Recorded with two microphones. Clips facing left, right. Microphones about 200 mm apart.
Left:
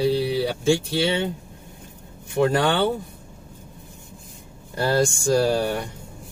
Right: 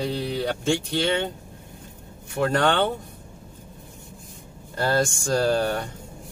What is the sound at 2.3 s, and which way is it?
Speech, 10° left (ahead or behind).